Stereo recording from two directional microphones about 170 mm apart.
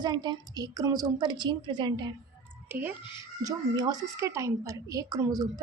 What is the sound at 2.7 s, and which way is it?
Speech, 10° right (ahead or behind).